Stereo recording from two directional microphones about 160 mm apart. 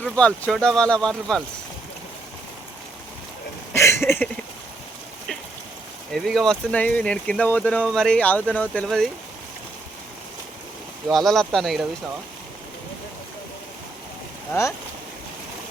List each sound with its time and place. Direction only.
0.0 s speech: 5° left (ahead or behind)
3.7 s a sound: 15° left (ahead or behind)
6.1 s speech: centre (ahead or behind)
11.1 s speech: centre (ahead or behind)